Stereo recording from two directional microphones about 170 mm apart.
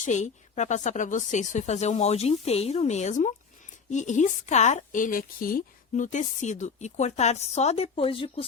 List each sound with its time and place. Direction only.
0.0 s a woman's voice: 45° left (ahead or behind)